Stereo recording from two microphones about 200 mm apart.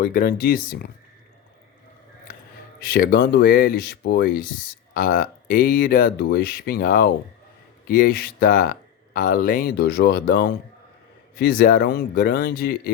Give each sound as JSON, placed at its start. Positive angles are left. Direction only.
{"t": 0.0, "sound": "speech", "side_deg": 50}
{"t": 2.8, "sound": "speech", "side_deg": 50}